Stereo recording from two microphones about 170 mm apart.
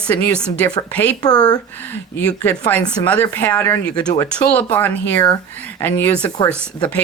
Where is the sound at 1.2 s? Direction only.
25° left (ahead or behind).